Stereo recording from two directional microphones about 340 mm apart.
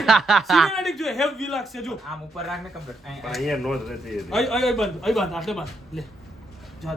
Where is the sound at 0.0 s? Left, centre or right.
Centre.